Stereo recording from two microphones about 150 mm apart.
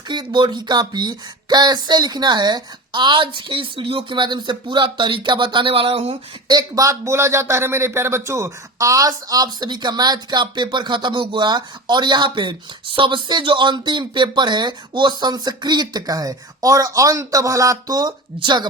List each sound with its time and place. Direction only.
0.1 s speech: 30° right (ahead or behind)
6.5 s speech: 25° right (ahead or behind)